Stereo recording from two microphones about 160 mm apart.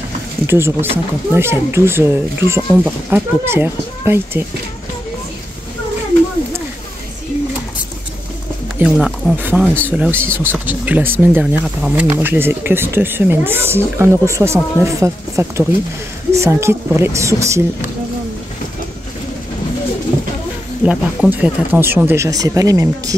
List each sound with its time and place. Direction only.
0.5 s speech: 15° right (ahead or behind)
8.7 s speech: 5° right (ahead or behind); by 17.6 s 20° right (ahead or behind)
20.8 s speech: 5° right (ahead or behind)